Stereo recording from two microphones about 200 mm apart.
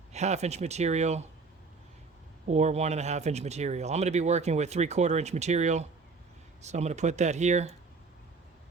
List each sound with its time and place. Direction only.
0.1 s speech: 35° right (ahead or behind)
2.5 s speech: 35° right (ahead or behind)